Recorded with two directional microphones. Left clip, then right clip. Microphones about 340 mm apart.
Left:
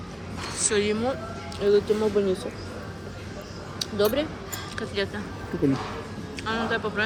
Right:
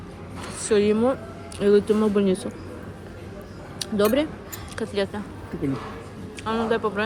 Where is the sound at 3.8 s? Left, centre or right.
Centre.